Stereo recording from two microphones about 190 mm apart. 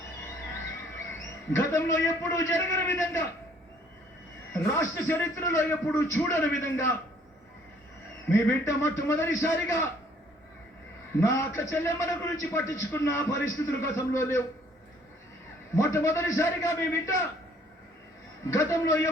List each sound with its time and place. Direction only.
1.5 s a man's voice: 15° left (ahead or behind)
4.5 s a man's voice: 10° left (ahead or behind)
8.3 s a man's voice: 15° left (ahead or behind)
11.2 s a man's voice: 15° left (ahead or behind)
15.7 s a man's voice: 15° left (ahead or behind)
18.5 s a man's voice: 15° left (ahead or behind)